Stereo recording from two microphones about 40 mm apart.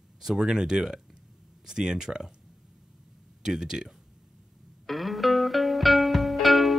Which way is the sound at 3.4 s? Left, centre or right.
Centre.